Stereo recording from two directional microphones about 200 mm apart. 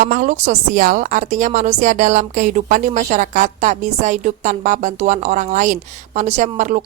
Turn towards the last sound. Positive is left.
turn(degrees=-40)  # may be behind; listen again after turning